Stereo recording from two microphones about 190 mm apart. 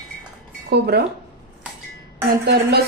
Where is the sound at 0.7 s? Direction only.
60° right (ahead or behind).